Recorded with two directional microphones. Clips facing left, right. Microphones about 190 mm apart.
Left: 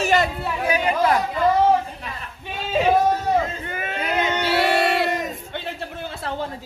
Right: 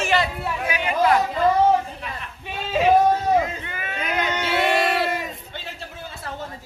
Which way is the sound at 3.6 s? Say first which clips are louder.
Left 4 dB; 50° left (ahead or behind).